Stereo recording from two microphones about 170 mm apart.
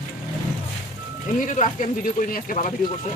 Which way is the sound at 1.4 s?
45° left (ahead or behind).